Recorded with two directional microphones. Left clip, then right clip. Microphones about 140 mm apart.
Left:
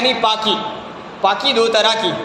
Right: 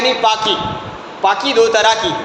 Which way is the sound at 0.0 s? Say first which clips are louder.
Right 2 dB; 25° left (ahead or behind).